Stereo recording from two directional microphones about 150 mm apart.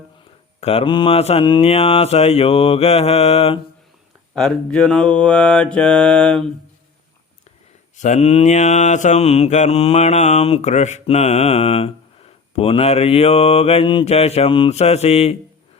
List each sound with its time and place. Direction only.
0.6 s mantra: 40° left (ahead or behind)
4.4 s mantra: 5° left (ahead or behind)
7.9 s mantra: 50° left (ahead or behind)